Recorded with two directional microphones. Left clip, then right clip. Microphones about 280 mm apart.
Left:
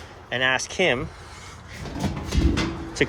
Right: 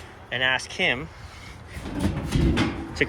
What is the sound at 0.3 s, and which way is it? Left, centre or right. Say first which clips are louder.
Speech: left 1 dB; centre.